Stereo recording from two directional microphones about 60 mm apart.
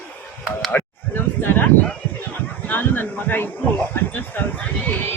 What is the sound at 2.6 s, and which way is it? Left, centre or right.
Speech, left.